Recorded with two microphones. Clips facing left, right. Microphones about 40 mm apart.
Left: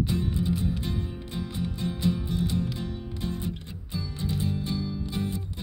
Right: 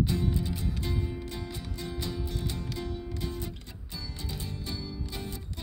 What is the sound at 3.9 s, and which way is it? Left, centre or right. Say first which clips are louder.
Music: left 8 dB; left.